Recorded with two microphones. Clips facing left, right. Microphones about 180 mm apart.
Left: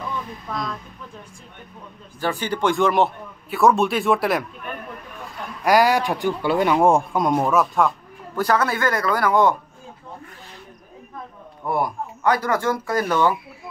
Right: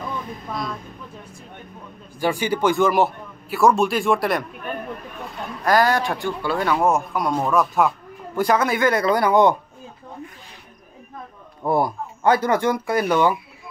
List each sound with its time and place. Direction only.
0.5 s a man's voice: 5° right (ahead or behind)
2.1 s a man's voice: 10° right (ahead or behind)
5.7 s speech: 10° left (ahead or behind)
7.4 s a man's voice: centre (ahead or behind)
8.4 s speech: 15° right (ahead or behind)
11.6 s speech: 30° right (ahead or behind)